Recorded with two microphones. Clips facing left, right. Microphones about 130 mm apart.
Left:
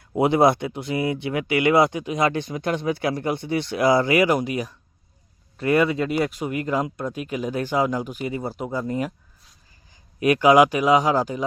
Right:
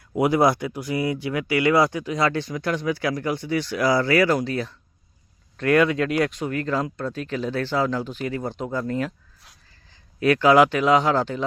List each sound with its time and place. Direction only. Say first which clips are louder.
0.2 s speech: left 1 dB; 25° left (ahead or behind)
10.2 s speech: left 1 dB; 15° left (ahead or behind)